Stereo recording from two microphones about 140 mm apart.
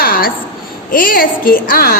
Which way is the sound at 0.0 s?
90° left.